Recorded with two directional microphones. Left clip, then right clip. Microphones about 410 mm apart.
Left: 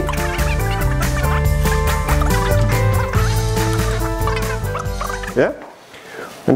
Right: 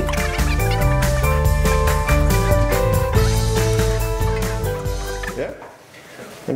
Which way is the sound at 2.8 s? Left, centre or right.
Centre.